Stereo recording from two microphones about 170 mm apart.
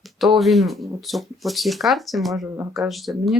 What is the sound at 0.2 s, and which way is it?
Speech, centre (ahead or behind).